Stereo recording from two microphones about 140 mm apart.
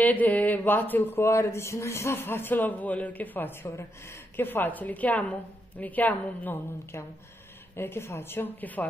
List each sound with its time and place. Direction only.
0.0 s speech: 10° left (ahead or behind)